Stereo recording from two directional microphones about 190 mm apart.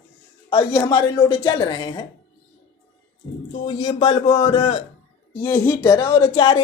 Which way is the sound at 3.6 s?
30° left (ahead or behind).